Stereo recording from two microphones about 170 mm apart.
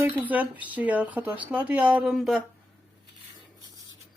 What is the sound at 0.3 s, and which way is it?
Speech, 10° right (ahead or behind).